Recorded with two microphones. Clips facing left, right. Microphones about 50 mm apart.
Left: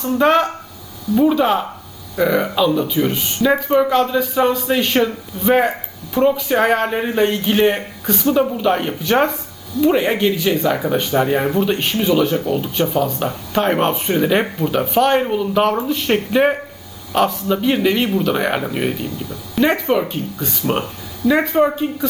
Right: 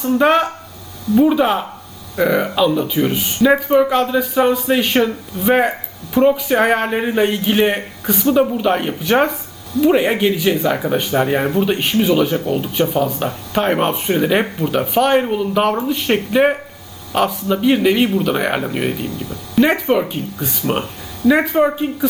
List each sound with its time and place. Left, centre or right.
0.0 s a man's voice: centre